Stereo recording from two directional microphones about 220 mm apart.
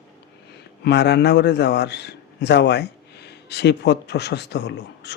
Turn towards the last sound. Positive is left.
turn(degrees=50)  # may be behind; listen again after turning